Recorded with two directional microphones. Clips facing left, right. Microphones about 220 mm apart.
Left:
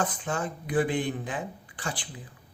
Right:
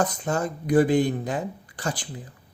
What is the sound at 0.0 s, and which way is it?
Speech, 40° right (ahead or behind).